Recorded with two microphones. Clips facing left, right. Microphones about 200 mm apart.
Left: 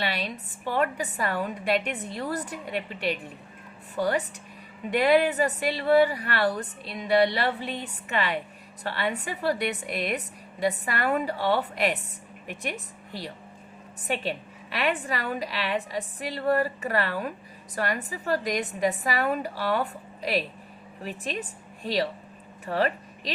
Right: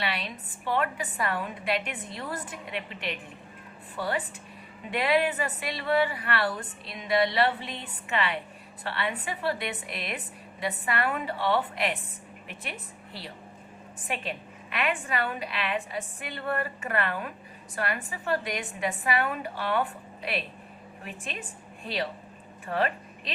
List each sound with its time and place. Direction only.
0.0 s a woman's voice: 35° left (ahead or behind)
22.6 s speech: 35° left (ahead or behind)